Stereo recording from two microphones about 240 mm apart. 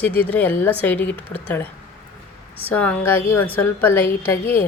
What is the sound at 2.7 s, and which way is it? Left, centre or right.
Speech, centre.